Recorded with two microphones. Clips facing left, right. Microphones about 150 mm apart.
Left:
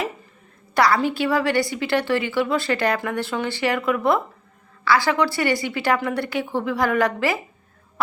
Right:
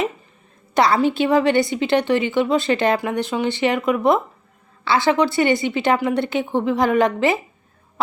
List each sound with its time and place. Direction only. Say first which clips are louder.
0.7 s a woman's voice: right 2 dB; 20° right (ahead or behind)